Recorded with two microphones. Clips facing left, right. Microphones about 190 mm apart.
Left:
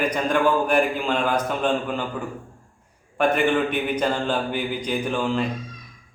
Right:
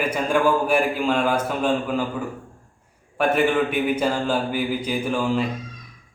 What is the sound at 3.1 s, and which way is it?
Speech, 5° right (ahead or behind).